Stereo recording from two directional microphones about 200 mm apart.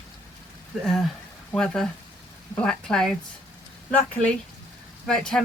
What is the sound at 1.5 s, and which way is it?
Speech, 5° left (ahead or behind).